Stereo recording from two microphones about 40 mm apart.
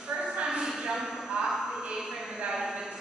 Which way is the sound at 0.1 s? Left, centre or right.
Centre.